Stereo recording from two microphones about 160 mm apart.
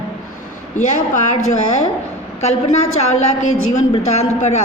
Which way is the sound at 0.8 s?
45° left (ahead or behind).